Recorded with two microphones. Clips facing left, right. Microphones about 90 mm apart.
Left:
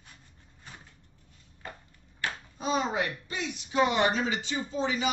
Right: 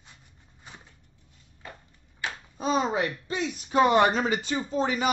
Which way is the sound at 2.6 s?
35° right (ahead or behind).